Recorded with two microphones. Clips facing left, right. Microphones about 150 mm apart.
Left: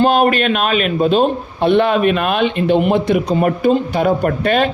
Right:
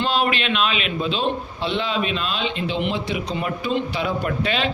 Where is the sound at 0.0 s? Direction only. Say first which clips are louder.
Left 9 dB; 45° left (ahead or behind).